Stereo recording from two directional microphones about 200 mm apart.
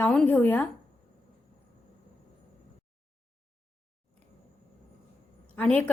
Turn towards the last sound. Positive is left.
turn(degrees=5)  # may be behind; listen again after turning